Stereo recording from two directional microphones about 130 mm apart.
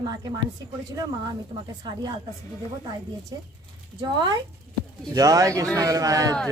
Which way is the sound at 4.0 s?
30° right (ahead or behind).